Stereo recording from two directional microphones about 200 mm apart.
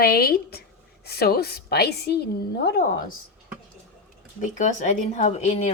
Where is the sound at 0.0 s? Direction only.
50° left (ahead or behind).